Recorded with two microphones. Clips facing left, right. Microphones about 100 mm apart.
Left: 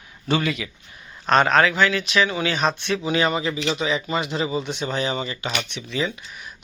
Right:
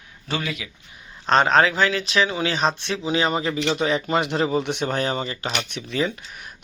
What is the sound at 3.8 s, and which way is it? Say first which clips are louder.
Speech: right 2 dB; 55° right (ahead or behind).